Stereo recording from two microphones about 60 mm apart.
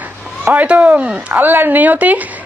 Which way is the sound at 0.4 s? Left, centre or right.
Right.